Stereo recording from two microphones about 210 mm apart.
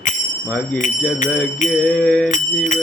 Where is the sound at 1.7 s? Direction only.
5° left (ahead or behind).